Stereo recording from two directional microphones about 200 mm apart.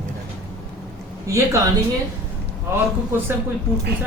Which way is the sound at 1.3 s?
15° right (ahead or behind).